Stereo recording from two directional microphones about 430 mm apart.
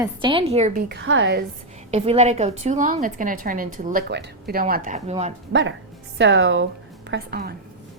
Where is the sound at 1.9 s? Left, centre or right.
Centre.